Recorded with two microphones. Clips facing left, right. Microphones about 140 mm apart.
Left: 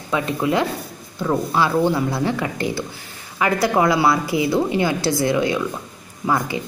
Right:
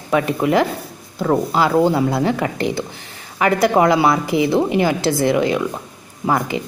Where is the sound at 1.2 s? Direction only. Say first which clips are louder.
Right 3 dB; 25° right (ahead or behind).